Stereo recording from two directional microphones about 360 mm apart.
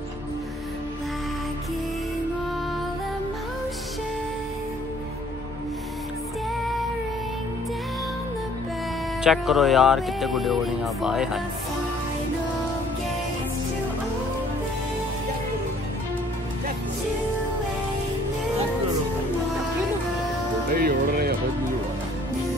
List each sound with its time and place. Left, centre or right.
9.2 s speech: centre
20.7 s music: right